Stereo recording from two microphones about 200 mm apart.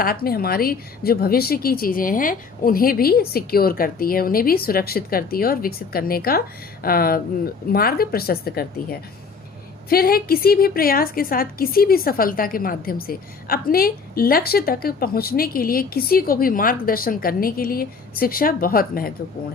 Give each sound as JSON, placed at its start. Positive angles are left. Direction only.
{"t": 0.0, "sound": "a woman's voice", "side_deg": 50}